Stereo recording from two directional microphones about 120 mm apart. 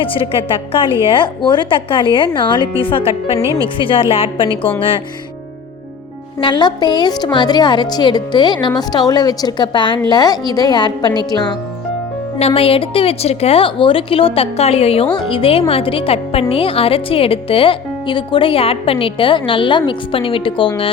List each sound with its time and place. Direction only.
0.0 s a woman's voice: 50° left (ahead or behind)
3.4 s speech: 25° right (ahead or behind)
3.8 s a woman's voice: 45° left (ahead or behind)
6.4 s a woman's voice: 40° left (ahead or behind)
12.4 s a woman's voice: 55° left (ahead or behind)